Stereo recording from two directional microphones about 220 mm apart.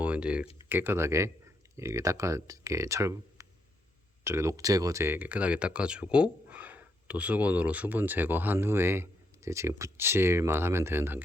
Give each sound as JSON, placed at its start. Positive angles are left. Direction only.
{"t": 0.0, "sound": "speech", "side_deg": -5}